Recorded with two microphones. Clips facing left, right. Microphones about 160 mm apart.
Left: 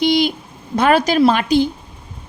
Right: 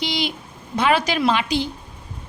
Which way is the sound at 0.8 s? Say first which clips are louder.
Left 6 dB; 45° left (ahead or behind).